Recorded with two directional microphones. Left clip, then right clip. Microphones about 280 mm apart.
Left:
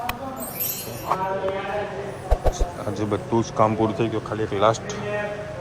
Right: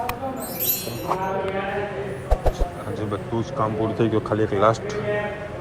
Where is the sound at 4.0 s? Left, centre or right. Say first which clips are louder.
Right 4 dB; centre.